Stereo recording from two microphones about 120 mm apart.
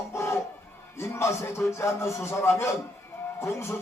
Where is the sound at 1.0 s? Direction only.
25° left (ahead or behind).